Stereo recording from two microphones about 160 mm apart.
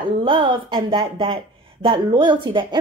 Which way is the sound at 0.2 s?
30° right (ahead or behind).